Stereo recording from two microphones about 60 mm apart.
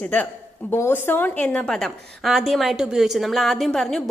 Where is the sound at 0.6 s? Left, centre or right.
Left.